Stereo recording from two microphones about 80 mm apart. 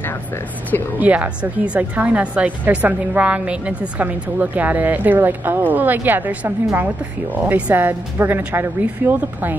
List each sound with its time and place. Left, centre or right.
0.9 s speech: centre